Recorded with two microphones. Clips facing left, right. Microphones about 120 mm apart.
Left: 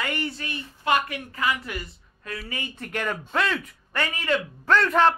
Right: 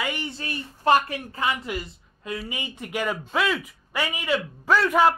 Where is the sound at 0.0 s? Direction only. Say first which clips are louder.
Left 1 dB; 10° right (ahead or behind).